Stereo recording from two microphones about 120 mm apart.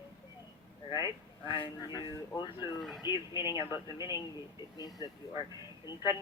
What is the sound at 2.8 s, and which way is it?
Speech, centre (ahead or behind).